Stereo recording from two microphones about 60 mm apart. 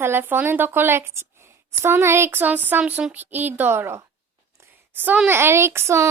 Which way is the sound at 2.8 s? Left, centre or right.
Right.